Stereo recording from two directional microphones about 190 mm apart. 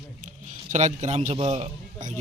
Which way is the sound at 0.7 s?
40° right (ahead or behind).